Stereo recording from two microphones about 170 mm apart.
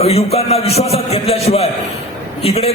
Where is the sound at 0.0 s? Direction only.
35° left (ahead or behind).